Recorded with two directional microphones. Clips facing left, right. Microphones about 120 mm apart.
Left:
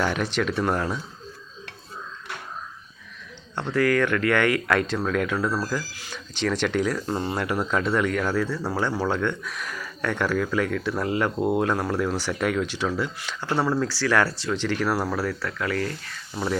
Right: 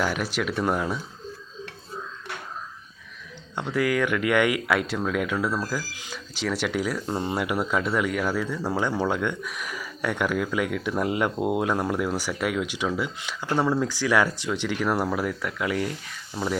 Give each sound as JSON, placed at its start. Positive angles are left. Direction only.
{"t": 0.0, "sound": "speech", "side_deg": -5}
{"t": 3.5, "sound": "speech", "side_deg": -10}
{"t": 13.5, "sound": "speech", "side_deg": 0}
{"t": 13.7, "sound": "speech", "side_deg": -15}
{"t": 14.8, "sound": "speech", "side_deg": 0}
{"t": 15.1, "sound": "speech", "side_deg": -15}
{"t": 16.3, "sound": "speech", "side_deg": 0}